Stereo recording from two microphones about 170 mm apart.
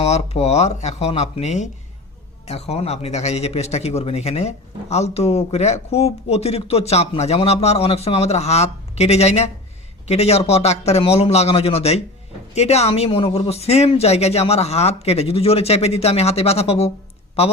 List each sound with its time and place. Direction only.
0.0 s speech: 35° left (ahead or behind)